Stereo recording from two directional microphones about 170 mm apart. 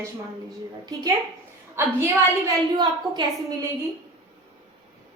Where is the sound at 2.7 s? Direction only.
25° right (ahead or behind).